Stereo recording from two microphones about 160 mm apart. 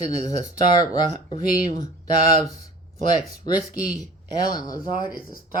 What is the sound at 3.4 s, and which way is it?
Speech, 25° left (ahead or behind).